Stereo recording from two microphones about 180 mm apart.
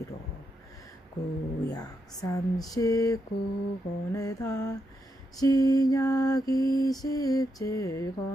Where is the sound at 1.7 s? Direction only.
20° left (ahead or behind).